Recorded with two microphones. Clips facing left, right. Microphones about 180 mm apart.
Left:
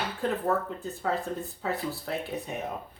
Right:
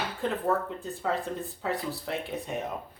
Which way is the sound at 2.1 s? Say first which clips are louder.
Even; centre (ahead or behind).